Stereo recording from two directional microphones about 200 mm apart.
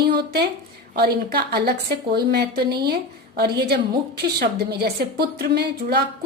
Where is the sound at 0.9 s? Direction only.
50° right (ahead or behind).